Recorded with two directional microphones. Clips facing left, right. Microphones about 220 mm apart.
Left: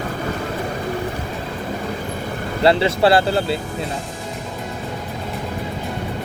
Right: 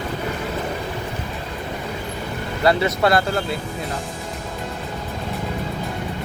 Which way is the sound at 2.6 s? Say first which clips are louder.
Left 3 dB; 30° left (ahead or behind).